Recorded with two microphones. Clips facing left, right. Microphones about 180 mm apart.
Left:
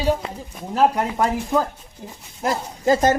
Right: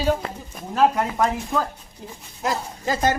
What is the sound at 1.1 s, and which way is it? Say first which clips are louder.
Speech: left 2 dB; 20° left (ahead or behind).